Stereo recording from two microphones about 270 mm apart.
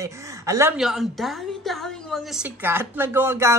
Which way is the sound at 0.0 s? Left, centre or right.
Centre.